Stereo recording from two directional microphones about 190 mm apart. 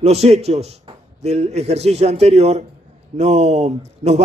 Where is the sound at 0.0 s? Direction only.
35° right (ahead or behind).